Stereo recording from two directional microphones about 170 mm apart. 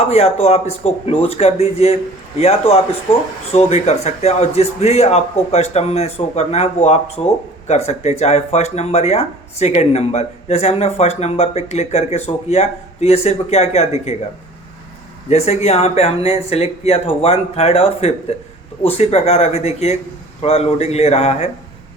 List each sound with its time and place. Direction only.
0.0 s speech: 40° left (ahead or behind)
15.3 s speech: 40° left (ahead or behind)